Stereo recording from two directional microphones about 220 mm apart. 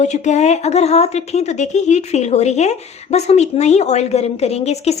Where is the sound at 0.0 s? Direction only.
30° left (ahead or behind).